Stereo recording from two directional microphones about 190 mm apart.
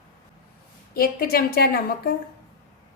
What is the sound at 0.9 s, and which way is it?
A woman's voice, 50° left (ahead or behind).